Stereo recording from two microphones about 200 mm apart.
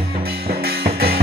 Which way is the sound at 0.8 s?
50° right (ahead or behind).